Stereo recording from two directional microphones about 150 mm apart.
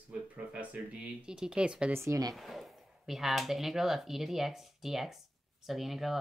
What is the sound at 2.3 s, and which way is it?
Speech, centre (ahead or behind).